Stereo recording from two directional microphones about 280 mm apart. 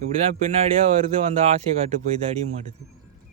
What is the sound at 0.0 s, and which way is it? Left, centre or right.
Speech, right.